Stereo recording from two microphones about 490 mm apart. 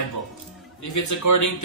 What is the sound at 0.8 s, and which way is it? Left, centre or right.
Speech, left.